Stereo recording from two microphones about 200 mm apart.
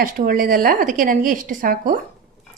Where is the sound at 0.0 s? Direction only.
45° right (ahead or behind).